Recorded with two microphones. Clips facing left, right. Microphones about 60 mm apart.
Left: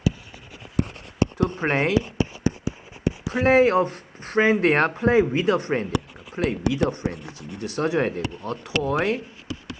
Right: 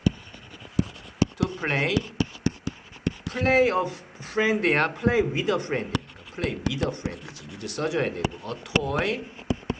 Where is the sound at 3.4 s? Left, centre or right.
Left.